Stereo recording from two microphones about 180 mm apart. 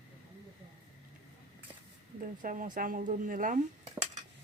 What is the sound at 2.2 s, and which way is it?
Speech, 50° right (ahead or behind).